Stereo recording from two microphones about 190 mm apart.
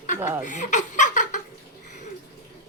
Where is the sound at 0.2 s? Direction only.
10° right (ahead or behind).